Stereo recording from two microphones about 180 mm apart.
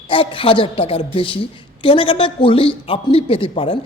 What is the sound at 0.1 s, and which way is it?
A woman's voice, 30° left (ahead or behind).